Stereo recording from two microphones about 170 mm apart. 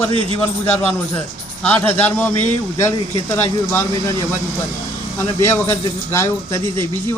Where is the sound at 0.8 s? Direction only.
10° left (ahead or behind).